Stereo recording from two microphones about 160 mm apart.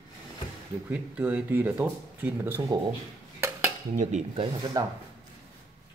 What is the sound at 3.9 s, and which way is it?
Speech, 45° right (ahead or behind).